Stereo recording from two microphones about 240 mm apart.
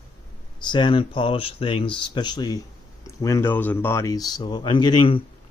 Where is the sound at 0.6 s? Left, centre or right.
Centre.